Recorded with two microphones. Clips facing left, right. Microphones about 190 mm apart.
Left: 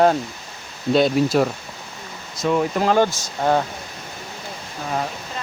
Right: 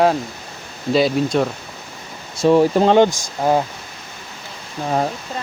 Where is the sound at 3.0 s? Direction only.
10° right (ahead or behind).